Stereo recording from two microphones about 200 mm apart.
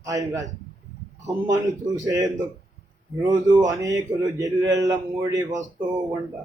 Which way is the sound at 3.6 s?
15° right (ahead or behind).